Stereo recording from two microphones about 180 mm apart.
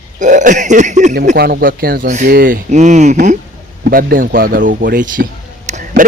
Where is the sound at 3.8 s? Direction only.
55° right (ahead or behind).